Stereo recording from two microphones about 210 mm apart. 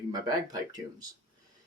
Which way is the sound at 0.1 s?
20° right (ahead or behind).